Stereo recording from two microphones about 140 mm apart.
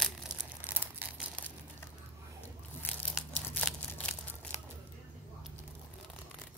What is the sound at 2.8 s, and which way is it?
Crumpling, 10° left (ahead or behind).